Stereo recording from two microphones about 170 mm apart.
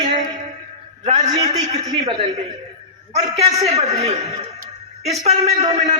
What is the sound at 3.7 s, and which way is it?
A man's voice, 35° right (ahead or behind).